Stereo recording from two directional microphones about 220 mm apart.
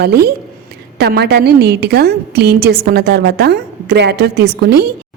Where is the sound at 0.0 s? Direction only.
45° right (ahead or behind).